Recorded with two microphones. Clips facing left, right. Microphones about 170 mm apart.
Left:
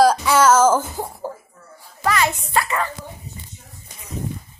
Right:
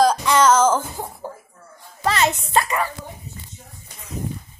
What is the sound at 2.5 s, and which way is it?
Speech, 20° right (ahead or behind).